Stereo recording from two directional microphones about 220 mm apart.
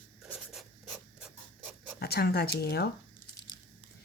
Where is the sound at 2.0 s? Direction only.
45° left (ahead or behind).